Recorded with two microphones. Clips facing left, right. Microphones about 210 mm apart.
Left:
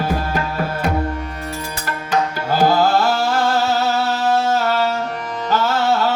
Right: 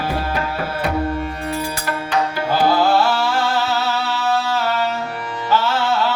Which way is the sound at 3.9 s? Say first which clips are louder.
Left 3 dB; 45° left (ahead or behind).